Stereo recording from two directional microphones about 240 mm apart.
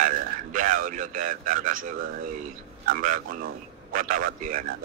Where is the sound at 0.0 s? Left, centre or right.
Right.